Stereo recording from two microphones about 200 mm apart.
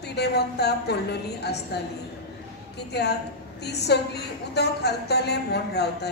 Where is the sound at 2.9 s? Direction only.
55° left (ahead or behind).